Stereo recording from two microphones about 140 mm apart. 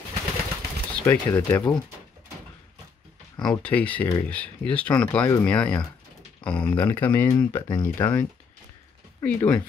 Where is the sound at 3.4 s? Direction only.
5° left (ahead or behind).